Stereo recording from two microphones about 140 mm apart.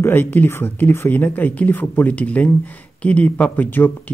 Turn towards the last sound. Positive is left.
turn(degrees=15)  # may be behind; listen again after turning